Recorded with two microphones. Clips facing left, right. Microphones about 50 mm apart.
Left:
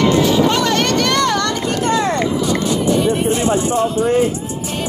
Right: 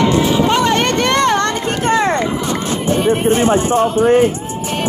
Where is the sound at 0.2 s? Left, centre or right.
Right.